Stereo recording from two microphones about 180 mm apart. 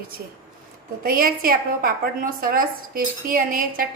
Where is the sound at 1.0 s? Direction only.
55° right (ahead or behind).